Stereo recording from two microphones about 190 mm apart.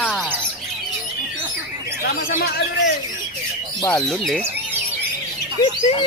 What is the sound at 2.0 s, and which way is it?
Speech, 55° left (ahead or behind).